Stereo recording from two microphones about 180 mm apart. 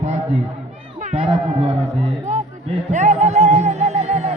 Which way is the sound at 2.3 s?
40° right (ahead or behind).